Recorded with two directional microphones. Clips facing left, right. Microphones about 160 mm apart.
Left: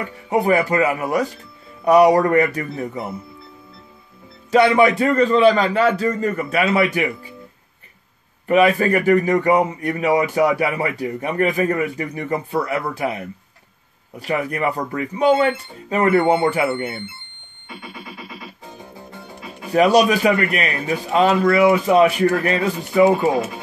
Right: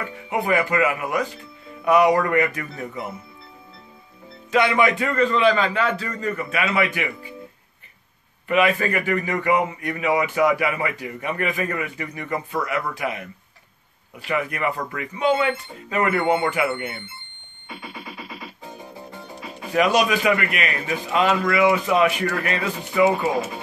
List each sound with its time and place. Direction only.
0.3 s a man's voice: 35° left (ahead or behind)
4.5 s a man's voice: 35° left (ahead or behind)
8.5 s a man's voice: 35° left (ahead or behind)
14.2 s a man's voice: 35° left (ahead or behind)
19.7 s a man's voice: 35° left (ahead or behind)